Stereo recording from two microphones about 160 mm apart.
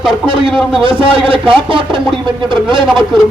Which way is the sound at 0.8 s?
30° right (ahead or behind).